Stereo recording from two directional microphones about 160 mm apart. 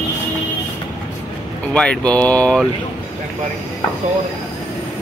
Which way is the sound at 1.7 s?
5° left (ahead or behind).